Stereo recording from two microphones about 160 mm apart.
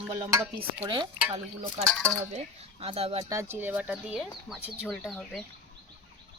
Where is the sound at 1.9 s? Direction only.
10° left (ahead or behind).